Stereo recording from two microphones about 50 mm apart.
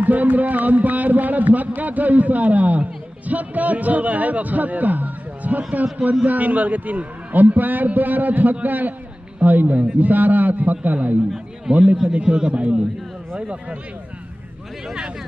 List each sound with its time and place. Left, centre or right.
0.0 s a man's voice: right
11.7 s a man's voice: centre
12.1 s speech: right